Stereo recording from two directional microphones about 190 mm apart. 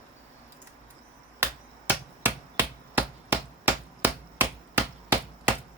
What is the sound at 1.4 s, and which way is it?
Finger snapping, 10° right (ahead or behind).